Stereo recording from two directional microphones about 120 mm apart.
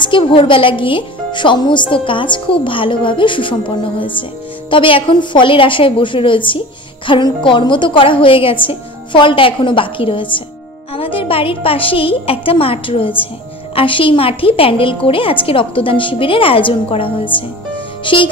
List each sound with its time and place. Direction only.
0.0 s a woman's voice: 45° left (ahead or behind)